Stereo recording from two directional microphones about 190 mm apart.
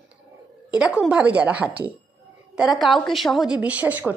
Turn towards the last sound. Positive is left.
turn(degrees=-10)  # may be behind; listen again after turning